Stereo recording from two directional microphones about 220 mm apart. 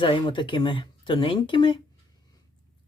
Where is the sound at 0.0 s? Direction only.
20° left (ahead or behind).